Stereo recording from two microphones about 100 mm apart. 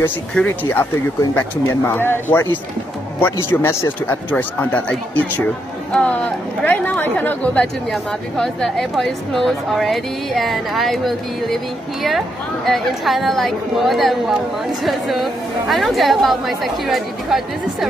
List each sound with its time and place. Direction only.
0.0 s speech: 15° left (ahead or behind)
1.9 s speech: 20° left (ahead or behind)
5.9 s speech: 15° left (ahead or behind)
7.9 s a woman's voice: 5° left (ahead or behind)